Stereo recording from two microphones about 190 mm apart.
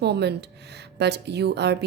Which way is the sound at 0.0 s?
60° right (ahead or behind).